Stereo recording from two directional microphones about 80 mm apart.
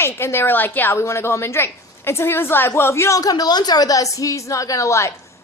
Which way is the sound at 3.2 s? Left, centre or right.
Left.